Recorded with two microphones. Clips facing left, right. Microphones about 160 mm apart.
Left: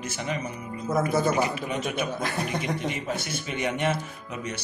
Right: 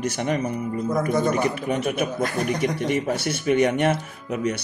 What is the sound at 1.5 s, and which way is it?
Speech, 60° right (ahead or behind).